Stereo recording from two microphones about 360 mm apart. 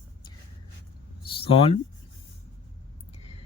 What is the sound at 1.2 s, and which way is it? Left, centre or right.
Speech, centre.